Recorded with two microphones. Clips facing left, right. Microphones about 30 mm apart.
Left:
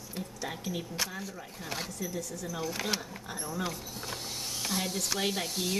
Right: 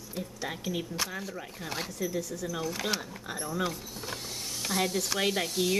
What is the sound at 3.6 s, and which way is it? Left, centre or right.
Power windows, centre.